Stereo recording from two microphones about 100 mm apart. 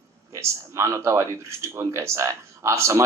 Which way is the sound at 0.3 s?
30° right (ahead or behind).